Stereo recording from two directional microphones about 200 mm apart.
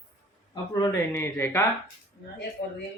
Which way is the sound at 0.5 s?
15° left (ahead or behind).